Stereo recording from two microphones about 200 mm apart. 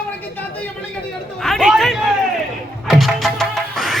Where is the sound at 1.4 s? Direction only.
Centre (ahead or behind).